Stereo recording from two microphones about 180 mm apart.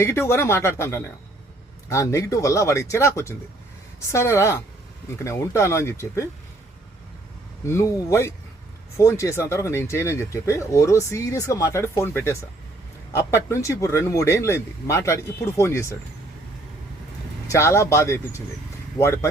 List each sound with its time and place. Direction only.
0.0 s speech: 15° left (ahead or behind)
7.6 s speech: 15° left (ahead or behind)
17.5 s speech: 15° left (ahead or behind)